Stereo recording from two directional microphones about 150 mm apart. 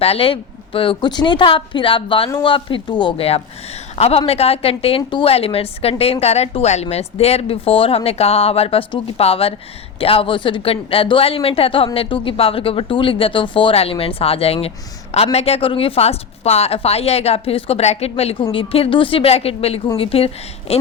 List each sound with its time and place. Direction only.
0.0 s a woman's voice: 40° left (ahead or behind)